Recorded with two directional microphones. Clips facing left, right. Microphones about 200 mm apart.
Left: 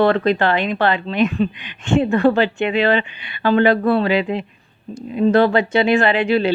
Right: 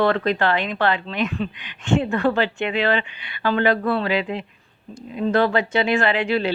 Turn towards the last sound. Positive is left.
turn(degrees=20)  # may be behind; listen again after turning